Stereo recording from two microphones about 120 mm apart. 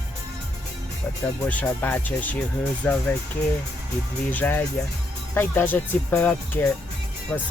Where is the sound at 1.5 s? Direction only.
15° left (ahead or behind).